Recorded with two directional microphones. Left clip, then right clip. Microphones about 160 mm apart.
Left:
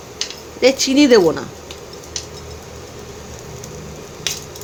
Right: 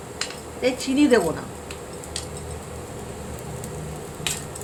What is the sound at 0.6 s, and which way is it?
Speech, 90° left.